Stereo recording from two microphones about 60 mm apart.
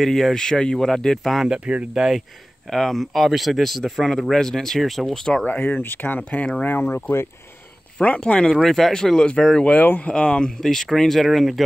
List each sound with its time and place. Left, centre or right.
0.0 s speech: centre
2.0 s speech: centre
5.4 s speech: left
8.0 s speech: left
9.7 s speech: left
10.1 s speech: centre